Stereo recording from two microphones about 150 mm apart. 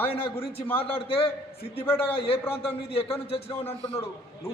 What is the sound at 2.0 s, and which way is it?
A man's voice, 40° left (ahead or behind).